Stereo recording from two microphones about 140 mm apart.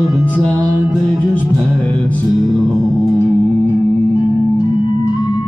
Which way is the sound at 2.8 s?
25° right (ahead or behind).